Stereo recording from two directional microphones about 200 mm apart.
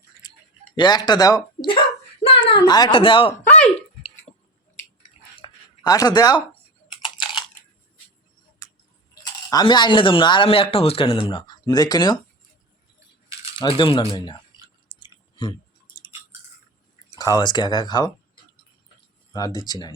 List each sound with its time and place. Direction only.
0.2 s a sound: 20° left (ahead or behind)
0.8 s speech: 20° left (ahead or behind)
2.2 s a sound: 25° left (ahead or behind)
2.6 s speech: 20° left (ahead or behind)
3.5 s a sound: 35° left (ahead or behind)
5.4 s a sound: 20° left (ahead or behind)
8.6 s tick-tock: 15° left (ahead or behind)
9.5 s speech: 20° left (ahead or behind)
13.6 s speech: 25° left (ahead or behind)
15.0 s chewing: 25° left (ahead or behind)
17.2 s speech: 20° left (ahead or behind)
19.3 s speech: 20° left (ahead or behind)